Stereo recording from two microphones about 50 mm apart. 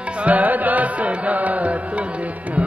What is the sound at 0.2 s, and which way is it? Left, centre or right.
Music, right.